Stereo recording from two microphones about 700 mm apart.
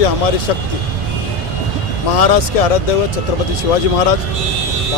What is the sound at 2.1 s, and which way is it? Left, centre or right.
Speech, left.